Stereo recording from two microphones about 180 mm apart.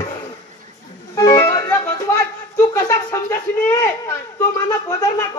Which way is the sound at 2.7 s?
15° left (ahead or behind).